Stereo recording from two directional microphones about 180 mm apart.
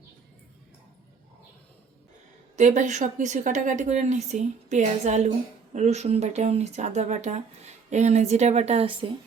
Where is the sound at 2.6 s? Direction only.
40° right (ahead or behind).